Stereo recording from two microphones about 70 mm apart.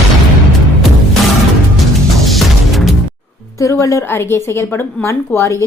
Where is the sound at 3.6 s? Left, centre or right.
Left.